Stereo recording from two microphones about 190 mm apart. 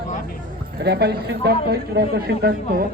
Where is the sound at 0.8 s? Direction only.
60° right (ahead or behind).